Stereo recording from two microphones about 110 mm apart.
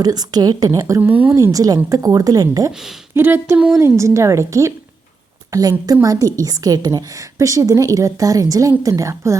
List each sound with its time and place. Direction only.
0.0 s a woman's voice: 35° right (ahead or behind)
1.0 s speech: 15° right (ahead or behind)
1.4 s a woman's voice: 30° right (ahead or behind)
3.2 s a woman's voice: 20° right (ahead or behind)